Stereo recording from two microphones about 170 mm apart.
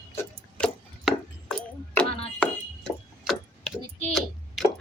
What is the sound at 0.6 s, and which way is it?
Tick-tock, 10° left (ahead or behind).